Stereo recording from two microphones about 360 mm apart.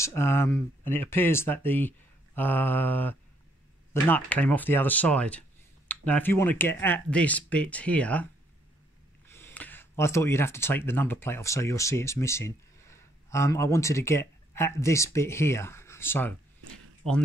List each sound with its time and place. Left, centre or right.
0.0 s speech: centre
9.3 s speech: centre